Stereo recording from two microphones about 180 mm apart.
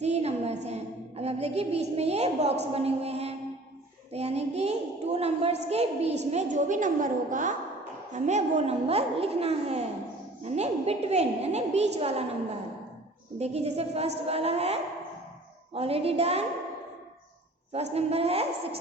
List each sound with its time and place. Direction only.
0.0 s a sound: 35° right (ahead or behind)
0.6 s a woman's voice: 35° right (ahead or behind)
13.4 s a woman's voice: 35° right (ahead or behind)
17.9 s a woman's voice: 35° right (ahead or behind)